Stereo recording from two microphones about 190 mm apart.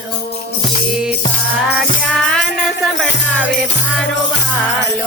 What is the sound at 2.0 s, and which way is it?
Music, 5° left (ahead or behind).